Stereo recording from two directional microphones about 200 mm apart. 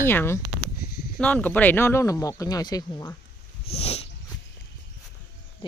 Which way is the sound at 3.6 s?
30° left (ahead or behind).